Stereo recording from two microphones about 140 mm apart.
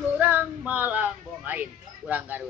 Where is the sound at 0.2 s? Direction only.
10° right (ahead or behind).